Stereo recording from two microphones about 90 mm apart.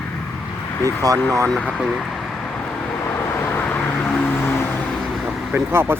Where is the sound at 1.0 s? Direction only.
40° right (ahead or behind).